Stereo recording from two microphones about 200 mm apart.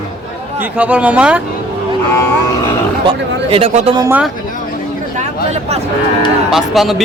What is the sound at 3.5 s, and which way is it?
Speech, 30° right (ahead or behind).